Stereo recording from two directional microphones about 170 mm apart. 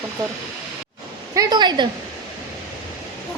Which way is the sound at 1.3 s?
20° right (ahead or behind).